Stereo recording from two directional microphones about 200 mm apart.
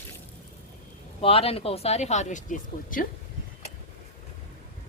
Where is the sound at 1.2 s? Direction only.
30° left (ahead or behind).